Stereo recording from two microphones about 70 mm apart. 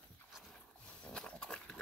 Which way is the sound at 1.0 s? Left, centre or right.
Centre.